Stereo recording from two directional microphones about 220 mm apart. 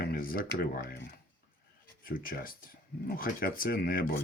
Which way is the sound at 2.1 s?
40° left (ahead or behind).